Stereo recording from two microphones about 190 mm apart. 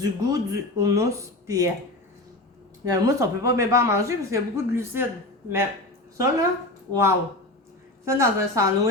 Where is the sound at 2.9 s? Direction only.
20° right (ahead or behind).